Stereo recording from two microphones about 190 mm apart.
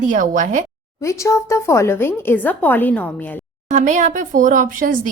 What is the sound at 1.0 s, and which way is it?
Speech, 15° left (ahead or behind).